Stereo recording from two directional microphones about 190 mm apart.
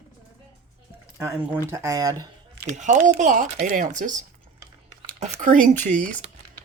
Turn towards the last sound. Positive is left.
turn(degrees=-40)  # may be behind; listen again after turning